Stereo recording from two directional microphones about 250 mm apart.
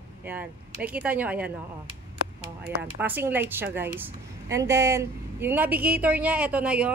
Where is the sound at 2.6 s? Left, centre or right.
Centre.